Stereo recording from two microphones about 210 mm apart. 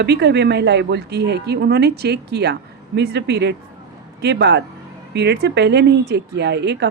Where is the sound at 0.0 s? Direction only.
50° right (ahead or behind).